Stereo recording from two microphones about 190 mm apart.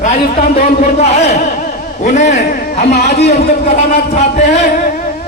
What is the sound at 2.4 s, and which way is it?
Speech, 55° left (ahead or behind).